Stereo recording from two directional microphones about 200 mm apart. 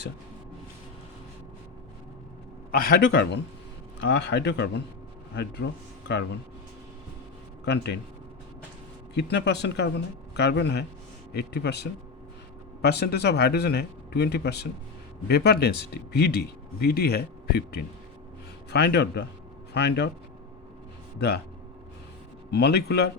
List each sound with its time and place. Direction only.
2.7 s speech: 50° left (ahead or behind)
7.6 s speech: 60° left (ahead or behind)
9.1 s speech: 55° left (ahead or behind)
21.2 s speech: 55° left (ahead or behind)
22.4 s speech: 55° left (ahead or behind)